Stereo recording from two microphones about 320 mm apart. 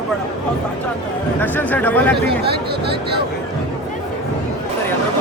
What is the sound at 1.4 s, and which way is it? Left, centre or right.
Speech, centre.